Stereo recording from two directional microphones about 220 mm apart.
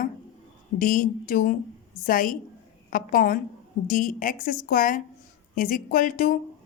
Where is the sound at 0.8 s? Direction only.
40° left (ahead or behind).